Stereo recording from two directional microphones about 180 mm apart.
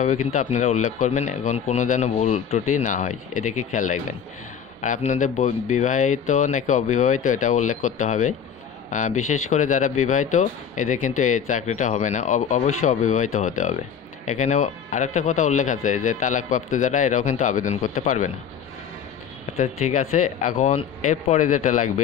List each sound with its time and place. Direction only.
0.0 s speech: 45° left (ahead or behind)
19.5 s speech: 45° left (ahead or behind)